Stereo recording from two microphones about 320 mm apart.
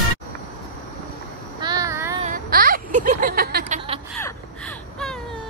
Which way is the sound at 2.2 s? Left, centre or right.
Right.